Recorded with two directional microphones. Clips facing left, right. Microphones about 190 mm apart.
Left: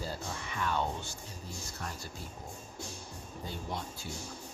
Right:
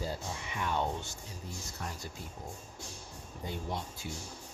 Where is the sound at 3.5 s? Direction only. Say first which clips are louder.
Right 2 dB; 20° right (ahead or behind).